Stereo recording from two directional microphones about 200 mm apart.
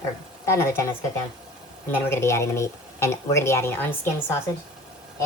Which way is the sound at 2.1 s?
15° left (ahead or behind).